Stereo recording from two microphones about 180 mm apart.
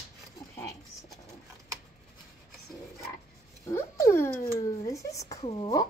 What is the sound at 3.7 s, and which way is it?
Speech, 15° left (ahead or behind).